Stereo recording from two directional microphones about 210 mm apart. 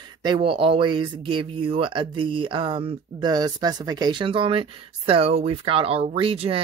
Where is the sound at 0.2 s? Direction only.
25° right (ahead or behind).